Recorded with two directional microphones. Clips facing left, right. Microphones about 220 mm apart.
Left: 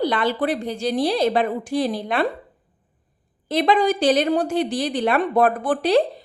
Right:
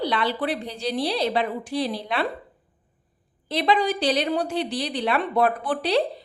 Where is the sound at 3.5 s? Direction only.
50° left (ahead or behind).